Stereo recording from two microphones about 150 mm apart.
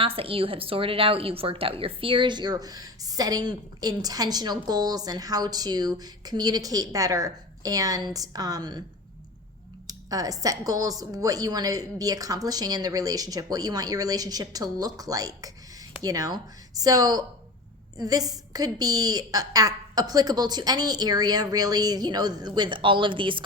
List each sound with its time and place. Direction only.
0.0 s a woman's voice: 40° right (ahead or behind)
9.8 s a woman's voice: 25° right (ahead or behind)